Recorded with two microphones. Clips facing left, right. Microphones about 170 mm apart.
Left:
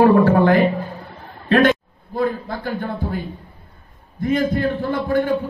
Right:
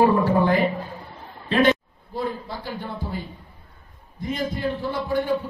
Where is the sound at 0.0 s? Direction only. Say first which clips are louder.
Left 5 dB; 75° left (ahead or behind).